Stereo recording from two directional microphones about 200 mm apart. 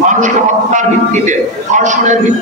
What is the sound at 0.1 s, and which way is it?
A man's voice, 40° right (ahead or behind).